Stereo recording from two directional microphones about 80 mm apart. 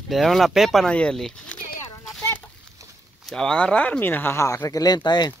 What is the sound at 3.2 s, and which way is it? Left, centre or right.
Speech, centre.